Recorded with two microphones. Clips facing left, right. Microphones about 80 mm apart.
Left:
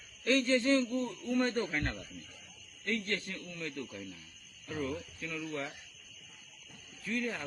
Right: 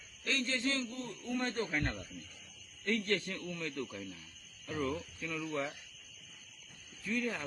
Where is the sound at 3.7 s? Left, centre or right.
Right.